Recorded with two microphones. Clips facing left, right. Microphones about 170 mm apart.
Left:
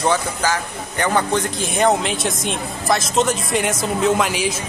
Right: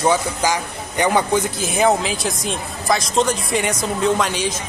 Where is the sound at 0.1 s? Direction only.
15° right (ahead or behind).